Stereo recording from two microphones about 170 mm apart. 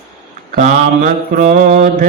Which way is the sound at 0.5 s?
50° right (ahead or behind).